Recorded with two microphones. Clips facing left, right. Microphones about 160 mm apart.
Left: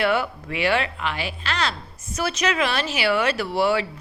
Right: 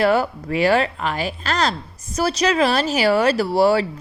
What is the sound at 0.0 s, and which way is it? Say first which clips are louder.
A woman's voice: right 5 dB; 40° right (ahead or behind).